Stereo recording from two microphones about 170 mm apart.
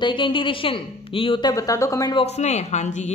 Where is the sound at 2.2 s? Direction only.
40° left (ahead or behind).